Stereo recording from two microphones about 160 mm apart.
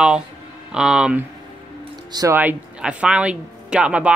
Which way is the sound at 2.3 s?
10° right (ahead or behind).